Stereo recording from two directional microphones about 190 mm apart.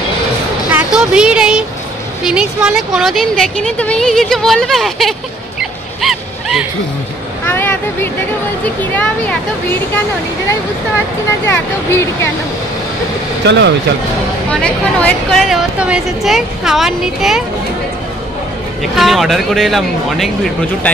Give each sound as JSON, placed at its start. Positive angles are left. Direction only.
{"t": 0.7, "sound": "a sound", "side_deg": -5}
{"t": 2.2, "sound": "a woman's voice", "side_deg": -5}
{"t": 5.6, "sound": "a sound", "side_deg": 0}
{"t": 7.4, "sound": "speech", "side_deg": 10}
{"t": 11.4, "sound": "speech", "side_deg": 15}
{"t": 13.5, "sound": "speech", "side_deg": -65}
{"t": 14.5, "sound": "a woman's voice", "side_deg": 5}
{"t": 18.8, "sound": "a woman's voice", "side_deg": 0}